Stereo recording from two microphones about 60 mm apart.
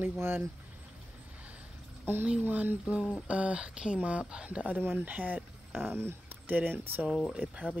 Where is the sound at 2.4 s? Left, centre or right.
Right.